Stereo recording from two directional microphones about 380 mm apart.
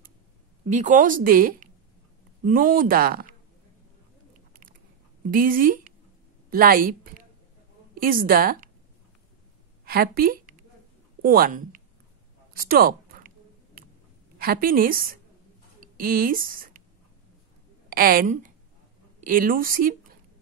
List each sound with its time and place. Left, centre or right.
0.7 s speech: centre
5.3 s a woman's voice: right
9.8 s a woman's voice: right
12.5 s a sound: right
14.4 s speech: right
17.8 s a woman's voice: right